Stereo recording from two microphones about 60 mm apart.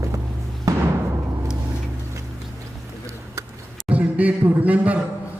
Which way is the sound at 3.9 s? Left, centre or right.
Right.